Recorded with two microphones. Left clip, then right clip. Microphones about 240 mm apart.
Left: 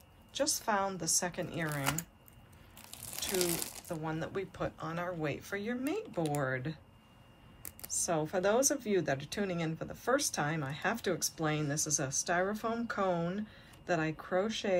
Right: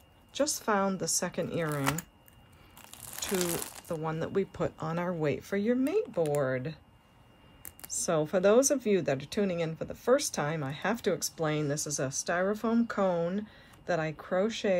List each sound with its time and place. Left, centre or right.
0.3 s speech: right
3.1 s speech: centre
7.9 s speech: right